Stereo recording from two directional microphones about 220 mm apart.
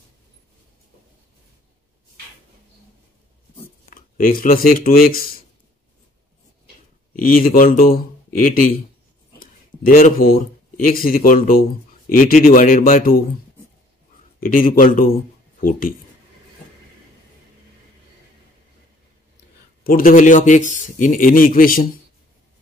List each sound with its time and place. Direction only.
3.9 s speech: 40° left (ahead or behind)
7.2 s speech: 40° left (ahead or behind)
9.4 s a sound: 40° left (ahead or behind)
10.3 s speech: 35° left (ahead or behind)
14.4 s speech: 40° left (ahead or behind)
19.8 s speech: 40° left (ahead or behind)